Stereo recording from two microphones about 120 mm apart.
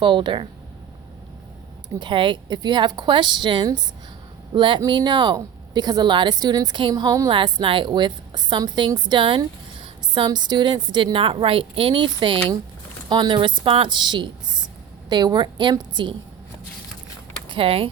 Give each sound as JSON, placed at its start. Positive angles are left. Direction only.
{"t": 0.0, "sound": "a woman's voice", "side_deg": -40}
{"t": 2.0, "sound": "a woman's voice", "side_deg": -45}
{"t": 7.3, "sound": "a woman's voice", "side_deg": -45}
{"t": 17.5, "sound": "speech", "side_deg": -50}